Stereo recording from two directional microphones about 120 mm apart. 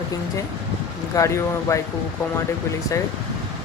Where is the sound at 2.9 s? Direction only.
25° left (ahead or behind).